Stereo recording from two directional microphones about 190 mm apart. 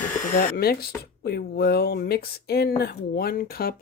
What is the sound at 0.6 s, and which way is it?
Speech, 55° left (ahead or behind).